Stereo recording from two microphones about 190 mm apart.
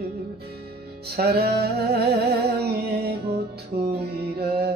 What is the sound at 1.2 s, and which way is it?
Music, 55° right (ahead or behind).